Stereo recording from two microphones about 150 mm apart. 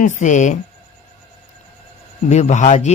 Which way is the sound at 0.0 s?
55° left (ahead or behind).